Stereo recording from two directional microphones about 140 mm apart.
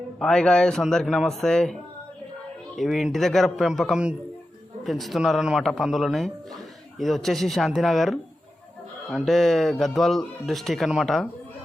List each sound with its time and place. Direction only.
0.2 s speech: 5° left (ahead or behind)
2.7 s speech: centre (ahead or behind)